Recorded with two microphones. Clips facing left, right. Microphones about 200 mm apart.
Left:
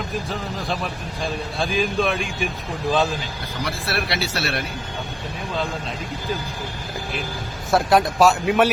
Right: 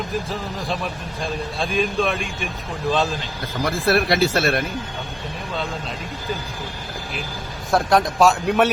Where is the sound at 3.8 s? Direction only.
50° right (ahead or behind).